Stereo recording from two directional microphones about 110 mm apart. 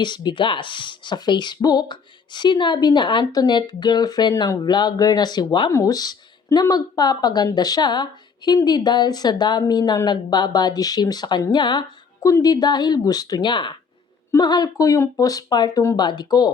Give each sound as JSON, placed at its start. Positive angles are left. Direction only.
{"t": 0.0, "sound": "speech", "side_deg": 45}
{"t": 12.2, "sound": "speech", "side_deg": 35}